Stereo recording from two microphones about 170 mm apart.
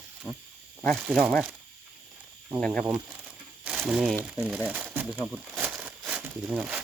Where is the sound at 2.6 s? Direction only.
5° left (ahead or behind).